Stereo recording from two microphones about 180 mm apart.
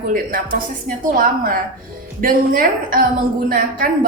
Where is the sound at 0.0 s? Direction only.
50° right (ahead or behind).